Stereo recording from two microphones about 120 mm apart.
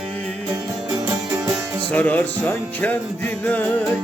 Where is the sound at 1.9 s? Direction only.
10° left (ahead or behind).